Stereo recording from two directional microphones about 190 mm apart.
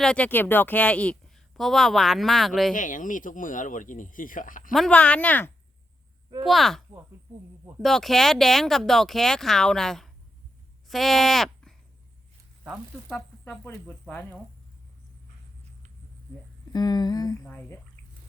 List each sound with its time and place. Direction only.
0.0 s speech: 5° left (ahead or behind)
2.7 s speech: 45° left (ahead or behind)
4.7 s speech: 5° left (ahead or behind)
13.1 s speech: 10° left (ahead or behind)
16.7 s a sound: 20° left (ahead or behind)
17.4 s a sound: 10° left (ahead or behind)